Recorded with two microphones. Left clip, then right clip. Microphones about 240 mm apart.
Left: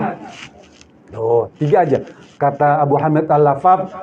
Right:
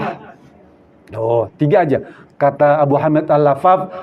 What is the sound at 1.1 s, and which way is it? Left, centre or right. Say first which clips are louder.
A man's voice: even; right.